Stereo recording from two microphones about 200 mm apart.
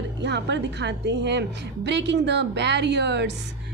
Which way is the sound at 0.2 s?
60° right (ahead or behind).